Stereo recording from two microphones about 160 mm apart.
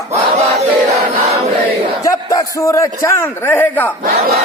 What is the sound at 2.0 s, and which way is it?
A man's voice, 20° left (ahead or behind).